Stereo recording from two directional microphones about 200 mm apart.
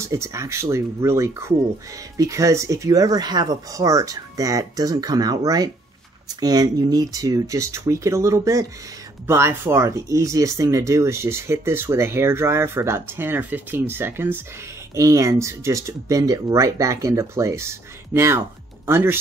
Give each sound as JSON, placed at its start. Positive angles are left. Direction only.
{"t": 0.0, "sound": "speech", "side_deg": -15}